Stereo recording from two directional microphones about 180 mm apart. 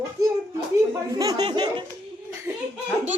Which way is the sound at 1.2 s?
20° right (ahead or behind).